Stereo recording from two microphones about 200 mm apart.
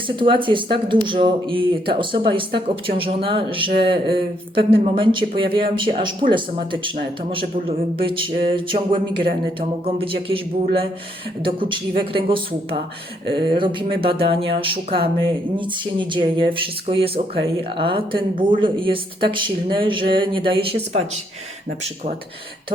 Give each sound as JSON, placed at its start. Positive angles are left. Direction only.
{"t": 0.2, "sound": "speech", "side_deg": -25}